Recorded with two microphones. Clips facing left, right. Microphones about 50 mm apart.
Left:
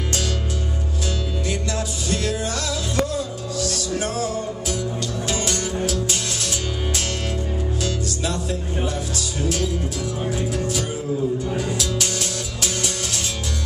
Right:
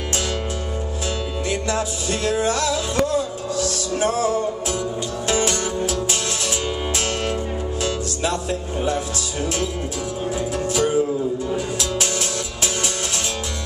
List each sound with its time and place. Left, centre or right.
1.5 s music: right
7.8 s music: right